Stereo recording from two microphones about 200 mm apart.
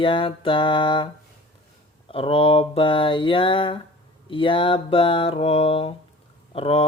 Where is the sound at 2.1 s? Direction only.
30° left (ahead or behind).